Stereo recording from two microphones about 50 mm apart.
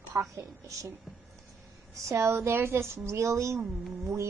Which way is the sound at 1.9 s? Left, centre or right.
Right.